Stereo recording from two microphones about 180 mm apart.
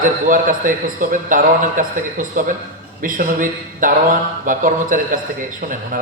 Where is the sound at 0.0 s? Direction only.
45° right (ahead or behind).